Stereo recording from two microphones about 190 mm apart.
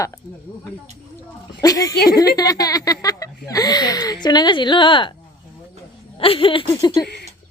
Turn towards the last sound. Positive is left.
turn(degrees=60)  # may be behind; listen again after turning